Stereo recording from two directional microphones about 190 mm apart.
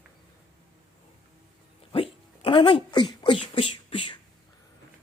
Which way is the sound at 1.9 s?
30° left (ahead or behind).